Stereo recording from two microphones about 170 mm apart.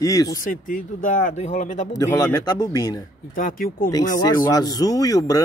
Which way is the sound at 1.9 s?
20° left (ahead or behind).